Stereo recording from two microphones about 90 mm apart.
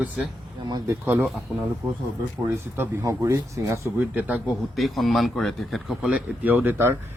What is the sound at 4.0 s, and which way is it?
Speech, 15° right (ahead or behind).